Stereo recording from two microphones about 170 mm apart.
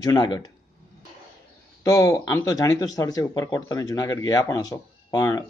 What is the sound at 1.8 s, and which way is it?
Speech, 20° left (ahead or behind).